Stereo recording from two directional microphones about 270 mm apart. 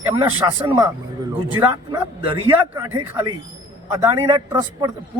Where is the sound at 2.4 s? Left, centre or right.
Centre.